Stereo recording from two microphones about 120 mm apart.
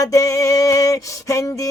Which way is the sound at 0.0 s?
25° left (ahead or behind).